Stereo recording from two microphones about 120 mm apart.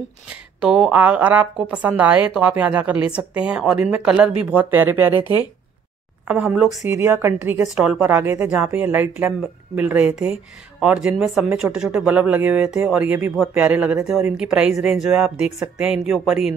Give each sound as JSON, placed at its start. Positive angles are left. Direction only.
{"t": 0.3, "sound": "a woman's voice", "side_deg": -5}
{"t": 6.2, "sound": "a woman's voice", "side_deg": -10}
{"t": 6.9, "sound": "speech", "side_deg": -20}
{"t": 7.7, "sound": "speech", "side_deg": -5}
{"t": 8.0, "sound": "a woman's voice", "side_deg": -20}